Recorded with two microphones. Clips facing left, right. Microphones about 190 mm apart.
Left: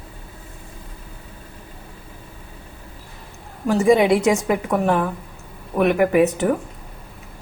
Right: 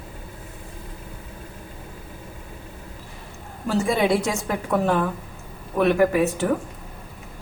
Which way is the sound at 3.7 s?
20° left (ahead or behind).